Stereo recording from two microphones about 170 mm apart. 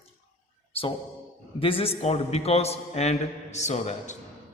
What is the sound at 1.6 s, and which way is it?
A man's voice, 30° left (ahead or behind).